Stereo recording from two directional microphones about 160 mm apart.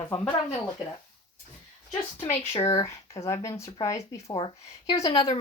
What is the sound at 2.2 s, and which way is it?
Speech, 40° left (ahead or behind).